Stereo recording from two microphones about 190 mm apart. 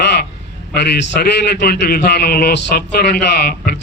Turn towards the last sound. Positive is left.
turn(degrees=55)  # may be behind; listen again after turning